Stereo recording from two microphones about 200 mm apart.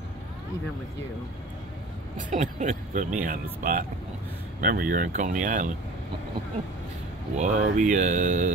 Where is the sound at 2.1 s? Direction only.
40° right (ahead or behind).